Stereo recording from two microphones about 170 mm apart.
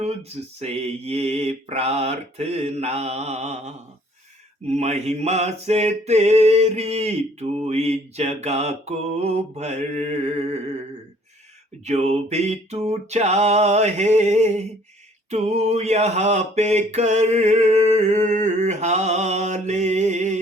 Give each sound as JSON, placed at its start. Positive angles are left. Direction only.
{"t": 0.0, "sound": "mantra", "side_deg": -40}
{"t": 11.9, "sound": "mantra", "side_deg": -40}